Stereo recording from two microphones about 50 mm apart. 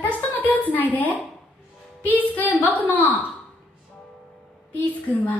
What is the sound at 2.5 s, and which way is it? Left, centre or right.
Speech, left.